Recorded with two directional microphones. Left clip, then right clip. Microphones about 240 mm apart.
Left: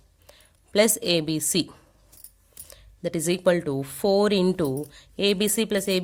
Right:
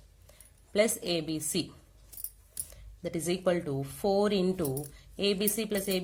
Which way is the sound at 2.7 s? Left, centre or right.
Left.